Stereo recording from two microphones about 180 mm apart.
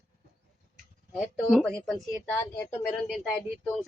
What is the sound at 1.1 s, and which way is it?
A man's voice, centre (ahead or behind).